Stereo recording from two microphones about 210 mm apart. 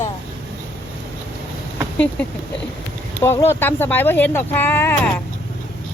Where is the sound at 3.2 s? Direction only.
10° left (ahead or behind).